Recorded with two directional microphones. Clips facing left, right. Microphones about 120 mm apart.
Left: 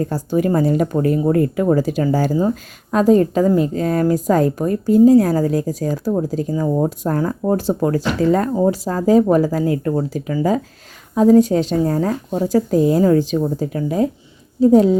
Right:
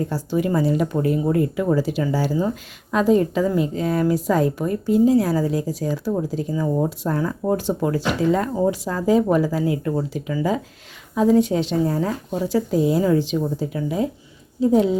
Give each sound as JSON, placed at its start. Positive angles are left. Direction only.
{"t": 0.1, "sound": "a woman's voice", "side_deg": 45}